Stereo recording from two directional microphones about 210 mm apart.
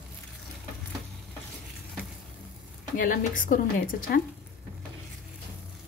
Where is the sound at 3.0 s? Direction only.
40° left (ahead or behind).